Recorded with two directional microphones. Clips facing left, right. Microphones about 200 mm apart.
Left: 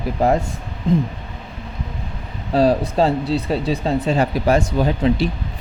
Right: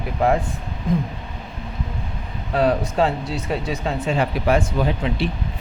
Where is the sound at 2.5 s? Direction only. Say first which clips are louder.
Left 3 dB; 35° left (ahead or behind).